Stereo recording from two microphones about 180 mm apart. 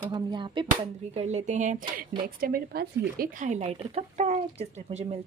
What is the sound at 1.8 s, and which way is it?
Speech, 25° right (ahead or behind).